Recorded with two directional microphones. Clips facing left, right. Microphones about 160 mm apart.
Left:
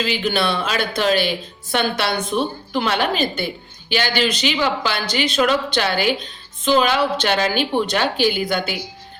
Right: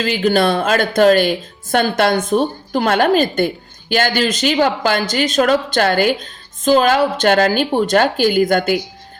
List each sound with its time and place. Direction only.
0.0 s speech: 45° right (ahead or behind)